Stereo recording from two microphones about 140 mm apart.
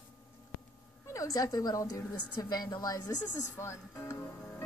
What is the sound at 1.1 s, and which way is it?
A woman's voice, 25° left (ahead or behind).